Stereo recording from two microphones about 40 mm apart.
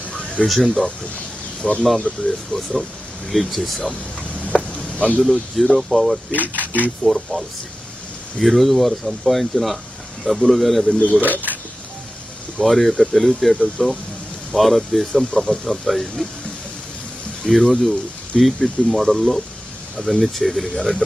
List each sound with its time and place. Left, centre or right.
0.1 s a sound: left
0.4 s speech: centre
1.6 s speech: centre
2.5 s speech: centre
4.4 s a sound: left
5.2 s speech: centre
6.5 s speech: right
7.0 s speech: centre
11.2 s speech: right
12.6 s speech: centre
15.1 s speech: centre
17.5 s speech: centre